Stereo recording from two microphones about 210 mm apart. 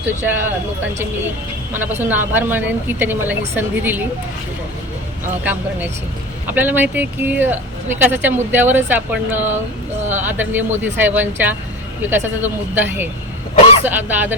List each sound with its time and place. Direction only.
0.2 s speech: 10° right (ahead or behind)
1.7 s speech: 10° right (ahead or behind)
6.5 s speech: 10° right (ahead or behind)